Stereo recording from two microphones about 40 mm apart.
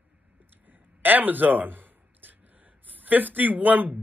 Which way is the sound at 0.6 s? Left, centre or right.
Right.